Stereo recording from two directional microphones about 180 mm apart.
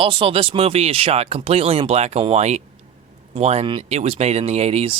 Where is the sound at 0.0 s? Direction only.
30° right (ahead or behind).